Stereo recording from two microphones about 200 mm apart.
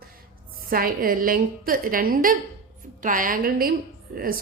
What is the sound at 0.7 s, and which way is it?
A woman's voice, 45° right (ahead or behind).